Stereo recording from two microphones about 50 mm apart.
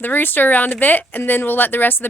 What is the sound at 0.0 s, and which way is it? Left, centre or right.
Speech, left.